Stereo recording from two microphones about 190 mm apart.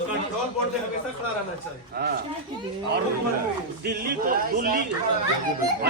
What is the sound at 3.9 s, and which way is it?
Speech, 60° right (ahead or behind).